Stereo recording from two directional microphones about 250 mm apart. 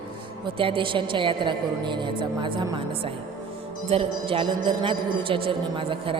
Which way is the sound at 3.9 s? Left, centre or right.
Right.